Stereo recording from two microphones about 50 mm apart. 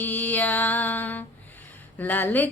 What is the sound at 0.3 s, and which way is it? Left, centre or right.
Music, left.